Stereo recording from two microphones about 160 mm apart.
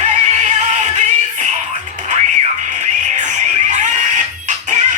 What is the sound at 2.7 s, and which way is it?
Music, 50° right (ahead or behind).